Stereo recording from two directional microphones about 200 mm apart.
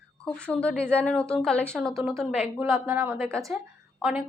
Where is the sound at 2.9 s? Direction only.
10° right (ahead or behind).